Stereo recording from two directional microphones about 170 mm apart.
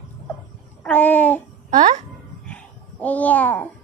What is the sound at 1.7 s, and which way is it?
Speech, 45° right (ahead or behind).